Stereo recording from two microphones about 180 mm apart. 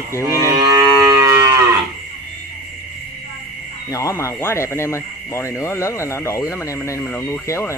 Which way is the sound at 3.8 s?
20° left (ahead or behind).